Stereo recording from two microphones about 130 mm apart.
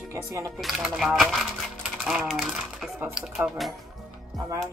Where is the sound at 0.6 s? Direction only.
Centre (ahead or behind).